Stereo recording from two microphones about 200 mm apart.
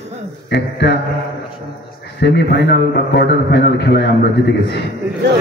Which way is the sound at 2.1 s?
60° left (ahead or behind).